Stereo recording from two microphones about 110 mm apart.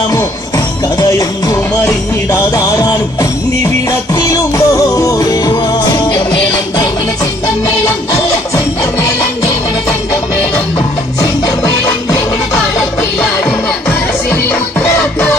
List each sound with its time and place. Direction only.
0.1 s music: 35° left (ahead or behind)
4.1 s music: 30° left (ahead or behind)
11.2 s music: 30° left (ahead or behind)